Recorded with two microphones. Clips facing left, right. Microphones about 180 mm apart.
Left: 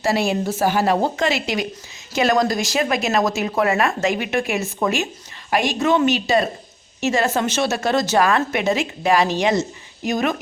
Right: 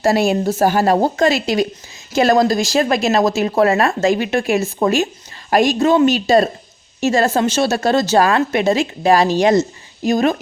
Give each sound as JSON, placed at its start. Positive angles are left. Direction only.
{"t": 0.0, "sound": "a woman's voice", "side_deg": -45}